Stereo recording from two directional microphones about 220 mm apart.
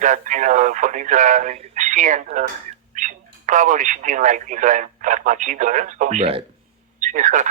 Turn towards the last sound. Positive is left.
turn(degrees=-35)  # may be behind; listen again after turning